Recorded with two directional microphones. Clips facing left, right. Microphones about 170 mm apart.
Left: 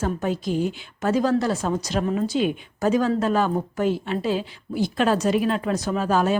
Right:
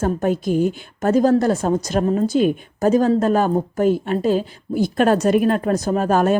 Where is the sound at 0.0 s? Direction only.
50° right (ahead or behind).